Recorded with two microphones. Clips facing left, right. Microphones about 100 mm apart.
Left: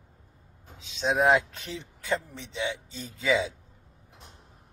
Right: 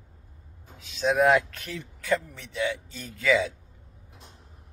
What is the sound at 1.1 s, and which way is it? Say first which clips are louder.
Speech: right 2 dB; 15° left (ahead or behind).